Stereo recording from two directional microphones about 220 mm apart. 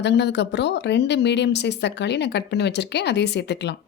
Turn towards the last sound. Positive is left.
turn(degrees=50)  # may be behind; listen again after turning